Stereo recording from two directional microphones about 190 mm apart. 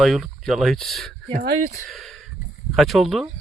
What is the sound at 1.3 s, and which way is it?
Speech, 35° right (ahead or behind).